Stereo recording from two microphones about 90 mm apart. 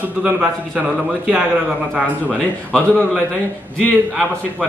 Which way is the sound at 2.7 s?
5° left (ahead or behind).